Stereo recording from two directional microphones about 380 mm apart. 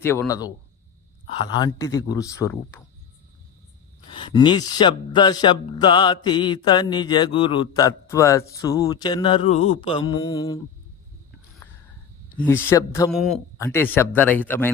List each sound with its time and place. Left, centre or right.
0.0 s speech: centre
4.2 s speech: centre
12.4 s speech: centre